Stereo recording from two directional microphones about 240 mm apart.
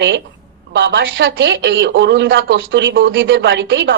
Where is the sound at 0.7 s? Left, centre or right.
Right.